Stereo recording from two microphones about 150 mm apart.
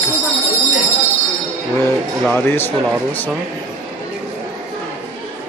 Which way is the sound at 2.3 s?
15° left (ahead or behind).